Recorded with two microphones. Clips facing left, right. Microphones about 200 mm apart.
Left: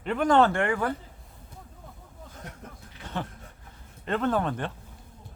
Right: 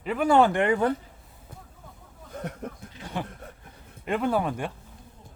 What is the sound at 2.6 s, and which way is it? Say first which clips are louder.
Speech: right 9 dB; 65° right (ahead or behind).